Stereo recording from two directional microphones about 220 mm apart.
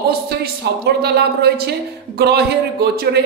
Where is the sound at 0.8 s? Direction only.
45° right (ahead or behind).